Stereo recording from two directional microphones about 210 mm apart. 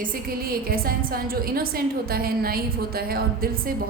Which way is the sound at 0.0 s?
45° right (ahead or behind).